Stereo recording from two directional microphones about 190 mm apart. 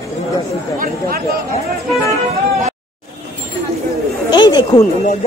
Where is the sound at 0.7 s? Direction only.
50° right (ahead or behind).